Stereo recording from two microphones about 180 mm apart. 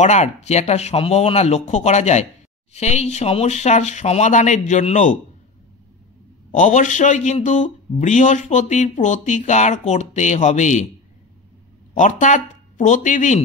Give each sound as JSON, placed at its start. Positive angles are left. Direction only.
{"t": 0.0, "sound": "speech", "side_deg": 40}
{"t": 6.5, "sound": "speech", "side_deg": 45}
{"t": 11.9, "sound": "speech", "side_deg": 45}